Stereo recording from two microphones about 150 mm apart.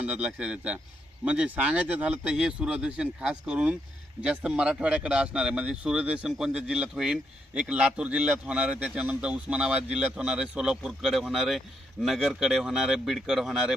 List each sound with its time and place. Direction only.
0.0 s speech: 10° right (ahead or behind)